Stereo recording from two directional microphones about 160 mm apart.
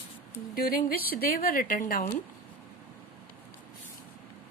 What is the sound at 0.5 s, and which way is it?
Speech, 65° left (ahead or behind).